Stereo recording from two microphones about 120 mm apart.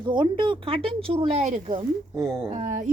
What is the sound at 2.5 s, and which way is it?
Speech, 90° right.